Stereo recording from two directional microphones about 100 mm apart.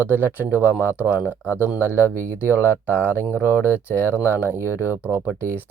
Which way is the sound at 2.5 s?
20° right (ahead or behind).